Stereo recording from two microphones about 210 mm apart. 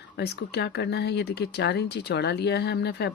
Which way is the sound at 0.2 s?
55° left (ahead or behind).